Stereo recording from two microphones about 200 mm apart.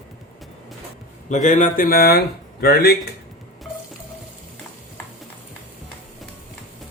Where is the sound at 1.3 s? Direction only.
40° left (ahead or behind).